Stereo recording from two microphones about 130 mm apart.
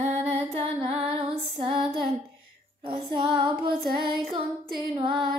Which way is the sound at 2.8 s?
50° right (ahead or behind).